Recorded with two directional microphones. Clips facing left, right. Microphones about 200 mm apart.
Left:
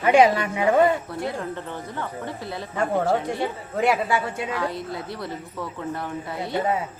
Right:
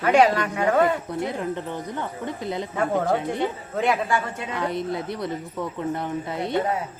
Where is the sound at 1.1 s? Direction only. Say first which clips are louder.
Right 2 dB; 20° right (ahead or behind).